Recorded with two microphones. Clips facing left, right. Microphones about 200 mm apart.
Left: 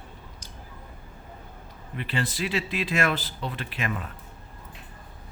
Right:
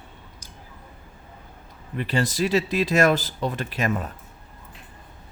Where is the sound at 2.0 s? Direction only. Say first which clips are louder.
Right 6 dB; 40° right (ahead or behind).